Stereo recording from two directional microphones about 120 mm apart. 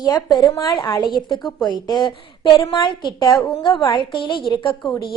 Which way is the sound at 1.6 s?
35° left (ahead or behind).